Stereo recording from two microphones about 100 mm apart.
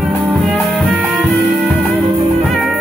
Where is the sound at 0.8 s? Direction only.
15° right (ahead or behind).